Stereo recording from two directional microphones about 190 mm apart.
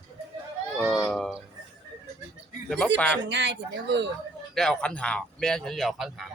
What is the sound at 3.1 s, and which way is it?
Speech, 65° right (ahead or behind).